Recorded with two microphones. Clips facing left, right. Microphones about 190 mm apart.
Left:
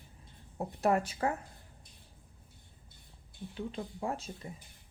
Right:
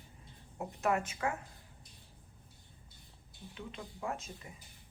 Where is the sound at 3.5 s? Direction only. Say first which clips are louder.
Left 7 dB; 35° left (ahead or behind).